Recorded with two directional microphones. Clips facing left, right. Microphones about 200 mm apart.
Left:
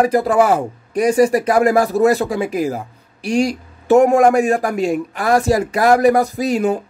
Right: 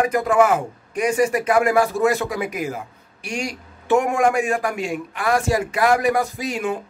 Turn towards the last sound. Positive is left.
turn(degrees=35)  # may be behind; listen again after turning